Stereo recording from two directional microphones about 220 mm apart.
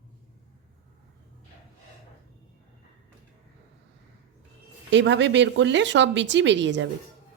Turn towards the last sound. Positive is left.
turn(degrees=-55)  # may be behind; listen again after turning